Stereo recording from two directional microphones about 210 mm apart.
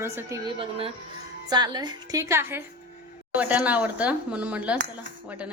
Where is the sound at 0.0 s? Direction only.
15° right (ahead or behind).